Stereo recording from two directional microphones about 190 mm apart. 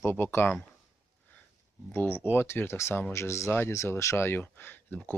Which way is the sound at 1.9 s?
10° left (ahead or behind).